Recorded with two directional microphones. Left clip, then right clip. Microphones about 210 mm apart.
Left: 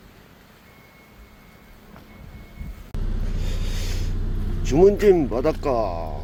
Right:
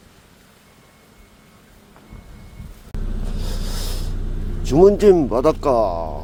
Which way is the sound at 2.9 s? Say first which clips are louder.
Right 2 dB; centre (ahead or behind).